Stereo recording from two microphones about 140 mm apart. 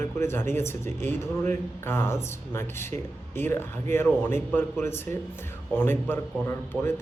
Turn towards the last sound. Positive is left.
turn(degrees=15)  # may be behind; listen again after turning